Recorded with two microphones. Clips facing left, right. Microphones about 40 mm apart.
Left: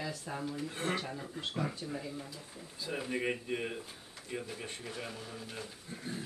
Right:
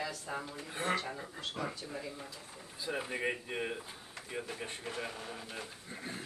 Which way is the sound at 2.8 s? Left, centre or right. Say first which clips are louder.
Even; centre.